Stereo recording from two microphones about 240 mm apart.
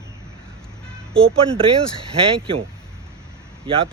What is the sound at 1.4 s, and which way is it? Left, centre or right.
Speech, right.